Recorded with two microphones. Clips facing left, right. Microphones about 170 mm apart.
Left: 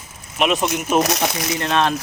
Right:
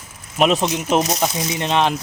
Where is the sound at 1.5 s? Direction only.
20° right (ahead or behind).